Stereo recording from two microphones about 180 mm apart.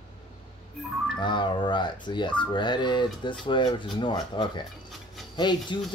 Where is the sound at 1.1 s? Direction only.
25° left (ahead or behind).